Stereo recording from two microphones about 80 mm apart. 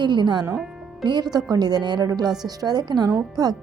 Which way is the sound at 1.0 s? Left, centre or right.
Right.